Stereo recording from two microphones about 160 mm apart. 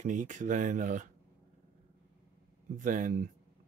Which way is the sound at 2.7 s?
55° right (ahead or behind).